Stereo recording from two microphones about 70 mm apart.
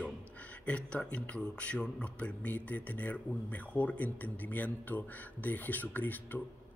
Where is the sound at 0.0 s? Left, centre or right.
Left.